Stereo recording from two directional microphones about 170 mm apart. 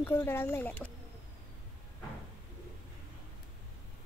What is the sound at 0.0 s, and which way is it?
Speech, 15° left (ahead or behind).